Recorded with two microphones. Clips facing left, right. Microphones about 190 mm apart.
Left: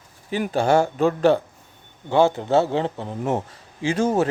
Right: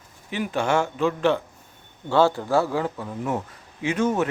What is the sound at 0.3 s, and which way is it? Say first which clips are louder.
A man's voice: left 4 dB; 35° left (ahead or behind).